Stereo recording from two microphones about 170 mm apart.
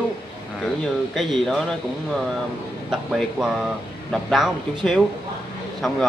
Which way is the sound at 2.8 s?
Centre (ahead or behind).